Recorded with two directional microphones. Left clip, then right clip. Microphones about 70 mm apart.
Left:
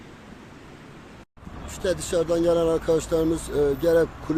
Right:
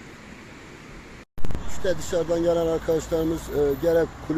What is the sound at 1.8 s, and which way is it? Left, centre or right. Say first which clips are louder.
Speech: left 1 dB; left.